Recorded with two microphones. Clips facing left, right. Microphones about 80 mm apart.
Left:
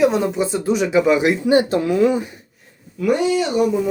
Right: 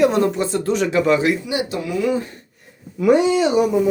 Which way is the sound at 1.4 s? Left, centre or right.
Left.